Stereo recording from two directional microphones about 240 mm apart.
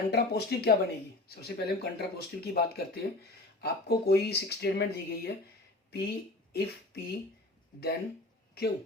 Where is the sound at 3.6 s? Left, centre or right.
Left.